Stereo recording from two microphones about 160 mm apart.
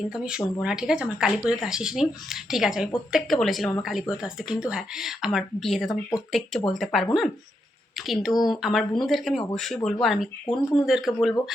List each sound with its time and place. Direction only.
0.1 s speech: 5° right (ahead or behind)